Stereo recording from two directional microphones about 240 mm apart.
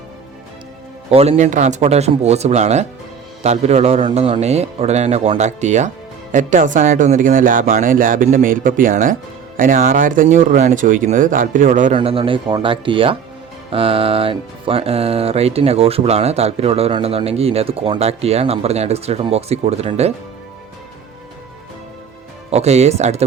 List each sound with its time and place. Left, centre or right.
1.1 s speech: right
22.5 s speech: right